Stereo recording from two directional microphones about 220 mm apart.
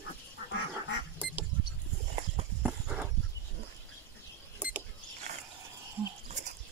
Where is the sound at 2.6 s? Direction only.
5° right (ahead or behind).